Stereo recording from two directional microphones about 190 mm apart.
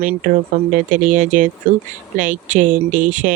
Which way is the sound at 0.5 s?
40° right (ahead or behind).